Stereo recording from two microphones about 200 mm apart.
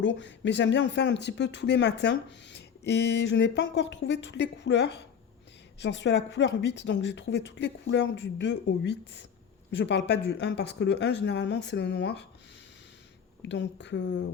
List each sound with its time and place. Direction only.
0.0 s speech: 65° left (ahead or behind)
13.4 s speech: 60° left (ahead or behind)